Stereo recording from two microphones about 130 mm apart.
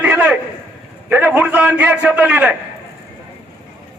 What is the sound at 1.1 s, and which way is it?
A man's voice, 10° right (ahead or behind).